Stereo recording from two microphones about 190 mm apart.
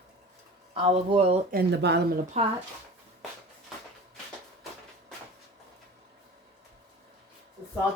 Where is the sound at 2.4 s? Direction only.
35° right (ahead or behind).